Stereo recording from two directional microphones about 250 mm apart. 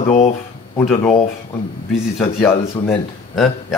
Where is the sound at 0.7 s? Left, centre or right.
Centre.